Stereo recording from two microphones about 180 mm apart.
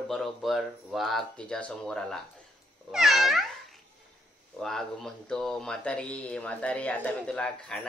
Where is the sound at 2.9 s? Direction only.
Centre (ahead or behind).